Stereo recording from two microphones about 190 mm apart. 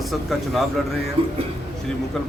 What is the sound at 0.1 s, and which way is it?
Speech, centre (ahead or behind).